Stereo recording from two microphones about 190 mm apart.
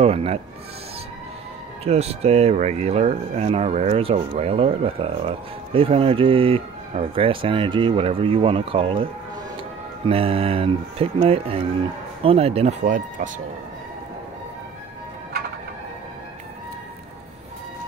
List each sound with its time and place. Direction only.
0.0 s speech: 30° right (ahead or behind)
1.9 s speech: 35° right (ahead or behind)